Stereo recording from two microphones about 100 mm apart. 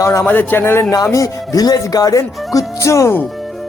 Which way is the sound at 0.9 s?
35° left (ahead or behind).